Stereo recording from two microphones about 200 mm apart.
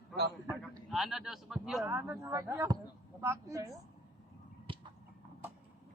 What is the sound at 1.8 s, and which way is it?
Speech, 10° right (ahead or behind).